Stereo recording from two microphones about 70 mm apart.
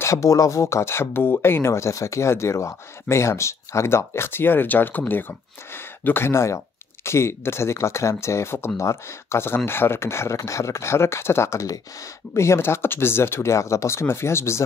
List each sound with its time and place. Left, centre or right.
0.0 s speech: left